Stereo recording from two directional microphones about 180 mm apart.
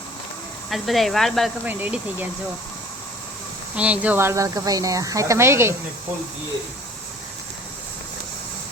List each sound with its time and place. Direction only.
0.7 s speech: centre (ahead or behind)
1.6 s speech: 10° right (ahead or behind)
3.8 s speech: 5° right (ahead or behind)